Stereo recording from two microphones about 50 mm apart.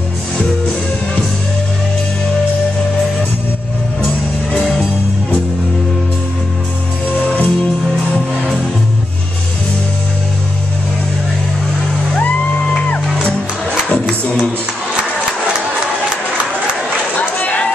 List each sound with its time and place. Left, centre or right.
7.2 s music: left
12.2 s music: left
17.2 s a sound: left